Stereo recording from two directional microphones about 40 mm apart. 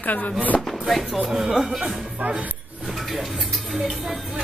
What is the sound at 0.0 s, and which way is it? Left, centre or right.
Speech, left.